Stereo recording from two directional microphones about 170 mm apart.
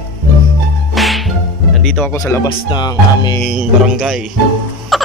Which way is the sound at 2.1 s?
15° left (ahead or behind).